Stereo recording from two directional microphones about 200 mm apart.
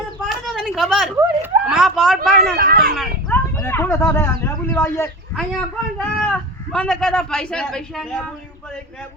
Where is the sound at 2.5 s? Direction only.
50° right (ahead or behind).